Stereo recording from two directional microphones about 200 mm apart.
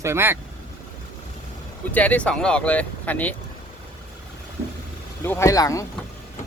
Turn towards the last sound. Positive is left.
turn(degrees=15)  # may be behind; listen again after turning